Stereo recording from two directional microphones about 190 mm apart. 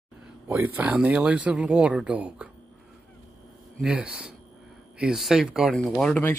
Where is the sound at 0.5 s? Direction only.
10° right (ahead or behind).